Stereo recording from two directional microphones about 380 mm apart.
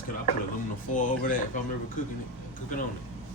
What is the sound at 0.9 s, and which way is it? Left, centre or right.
Speech, left.